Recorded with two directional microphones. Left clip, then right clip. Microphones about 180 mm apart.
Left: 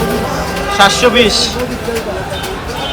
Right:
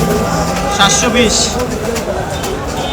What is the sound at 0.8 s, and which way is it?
Speech, 5° left (ahead or behind).